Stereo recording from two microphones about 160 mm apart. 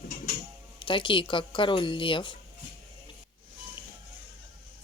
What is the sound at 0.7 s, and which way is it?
Speech, 30° left (ahead or behind).